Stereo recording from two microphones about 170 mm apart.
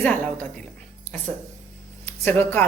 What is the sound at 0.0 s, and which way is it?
Speech, 10° left (ahead or behind).